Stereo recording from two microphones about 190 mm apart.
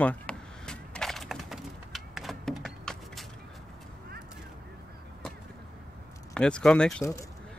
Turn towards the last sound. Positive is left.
turn(degrees=5)  # may be behind; listen again after turning